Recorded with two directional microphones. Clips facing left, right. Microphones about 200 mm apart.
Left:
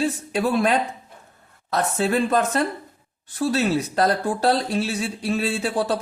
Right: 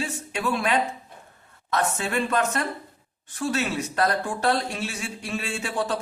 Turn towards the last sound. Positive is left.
turn(degrees=35)  # may be behind; listen again after turning